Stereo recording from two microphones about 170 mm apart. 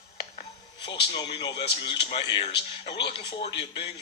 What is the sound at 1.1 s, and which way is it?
Speech, 25° left (ahead or behind).